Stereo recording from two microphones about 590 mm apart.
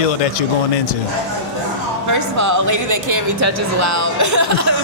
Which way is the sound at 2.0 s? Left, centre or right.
Right.